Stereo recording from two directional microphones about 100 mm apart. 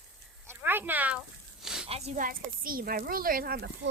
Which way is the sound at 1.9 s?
90° right.